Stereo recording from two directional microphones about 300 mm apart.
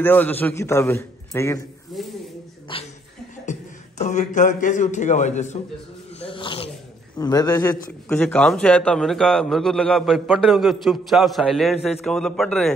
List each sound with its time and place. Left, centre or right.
0.0 s a man's voice: centre
4.0 s a man's voice: left
6.1 s dog: centre
7.2 s a man's voice: centre